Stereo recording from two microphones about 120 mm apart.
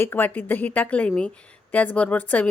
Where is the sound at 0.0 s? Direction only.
15° left (ahead or behind).